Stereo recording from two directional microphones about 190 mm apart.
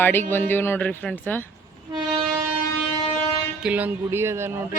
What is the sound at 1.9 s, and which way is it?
Train, 25° right (ahead or behind).